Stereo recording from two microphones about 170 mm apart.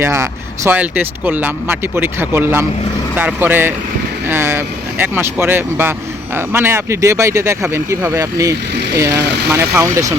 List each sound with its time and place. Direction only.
0.0 s speech: 15° right (ahead or behind)